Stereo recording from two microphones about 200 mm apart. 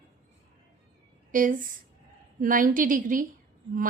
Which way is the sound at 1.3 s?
40° right (ahead or behind).